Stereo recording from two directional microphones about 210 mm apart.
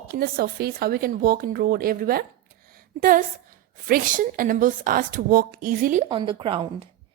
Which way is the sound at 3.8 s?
40° right (ahead or behind).